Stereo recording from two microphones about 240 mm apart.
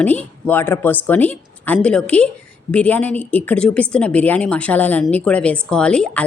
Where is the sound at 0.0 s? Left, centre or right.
Centre.